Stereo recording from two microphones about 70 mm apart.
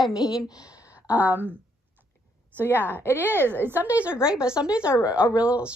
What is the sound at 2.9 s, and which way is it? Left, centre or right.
Speech, left.